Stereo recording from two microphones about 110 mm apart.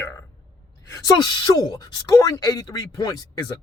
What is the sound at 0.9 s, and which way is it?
Speech, 30° left (ahead or behind).